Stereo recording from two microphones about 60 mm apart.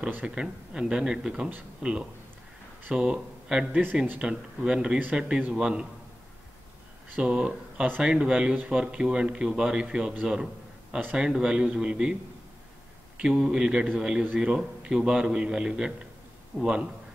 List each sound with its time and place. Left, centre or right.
0.3 s a man's voice: centre
3.7 s a man's voice: right
7.2 s a man's voice: centre
10.2 s a sound: centre
11.1 s a man's voice: centre
13.2 s a man's voice: centre